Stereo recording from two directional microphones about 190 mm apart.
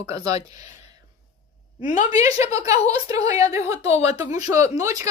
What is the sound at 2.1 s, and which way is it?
A woman's voice, 20° right (ahead or behind).